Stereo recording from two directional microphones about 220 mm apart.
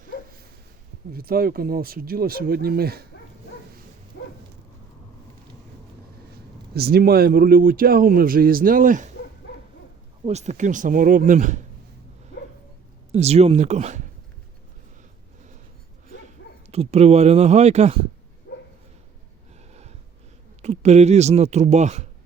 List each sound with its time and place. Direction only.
1.1 s speech: 45° right (ahead or behind)
6.7 s speech: 45° right (ahead or behind)
10.2 s speech: 30° right (ahead or behind)
13.1 s speech: 30° right (ahead or behind)
16.6 s speech: 30° right (ahead or behind)
18.5 s dog: 55° left (ahead or behind)
19.7 s snort: 30° right (ahead or behind)
20.6 s speech: 30° right (ahead or behind)